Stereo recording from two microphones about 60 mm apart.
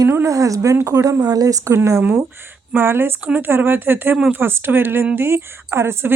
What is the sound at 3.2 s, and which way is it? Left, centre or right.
Speech, right.